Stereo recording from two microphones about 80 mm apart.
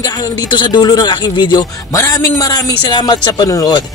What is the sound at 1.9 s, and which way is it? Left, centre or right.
A woman's voice, left.